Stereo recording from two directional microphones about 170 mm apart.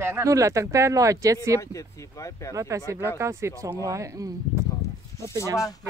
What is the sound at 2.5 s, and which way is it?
Speech, 20° right (ahead or behind).